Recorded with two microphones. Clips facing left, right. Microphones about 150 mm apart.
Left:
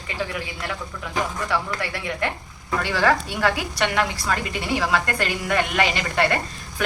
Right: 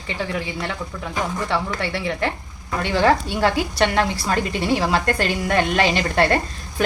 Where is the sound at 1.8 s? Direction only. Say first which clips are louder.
Right 3 dB; 30° right (ahead or behind).